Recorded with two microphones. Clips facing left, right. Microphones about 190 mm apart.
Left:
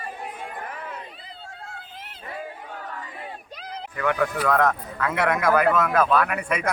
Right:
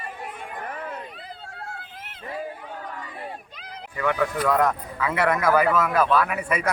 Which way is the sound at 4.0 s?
Centre (ahead or behind).